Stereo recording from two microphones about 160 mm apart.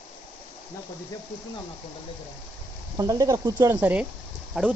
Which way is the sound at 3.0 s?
20° right (ahead or behind).